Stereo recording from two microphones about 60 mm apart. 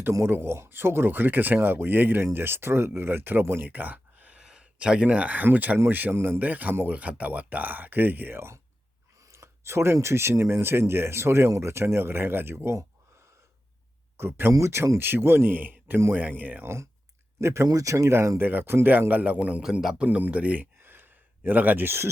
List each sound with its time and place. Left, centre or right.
0.3 s speech: right
3.6 s a sound: right
4.4 s a sound: centre
5.0 s speech: right
6.1 s speech: right
6.4 s speech: right
14.2 s speech: right
17.4 s speech: right
17.7 s speech: right
18.3 s speech: right